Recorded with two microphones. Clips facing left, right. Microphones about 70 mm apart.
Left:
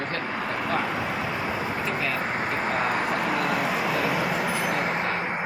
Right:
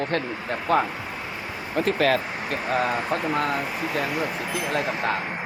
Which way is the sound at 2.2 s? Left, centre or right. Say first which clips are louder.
Left 4 dB; left.